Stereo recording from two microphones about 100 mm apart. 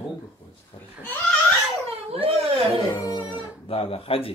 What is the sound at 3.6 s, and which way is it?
Speech, 70° left (ahead or behind).